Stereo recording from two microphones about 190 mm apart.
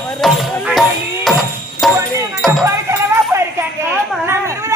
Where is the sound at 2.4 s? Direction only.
Centre (ahead or behind).